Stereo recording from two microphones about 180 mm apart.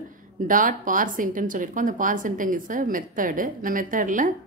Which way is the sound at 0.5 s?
50° right (ahead or behind).